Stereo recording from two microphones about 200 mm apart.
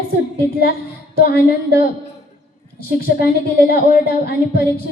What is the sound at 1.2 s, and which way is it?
Speech, 50° left (ahead or behind).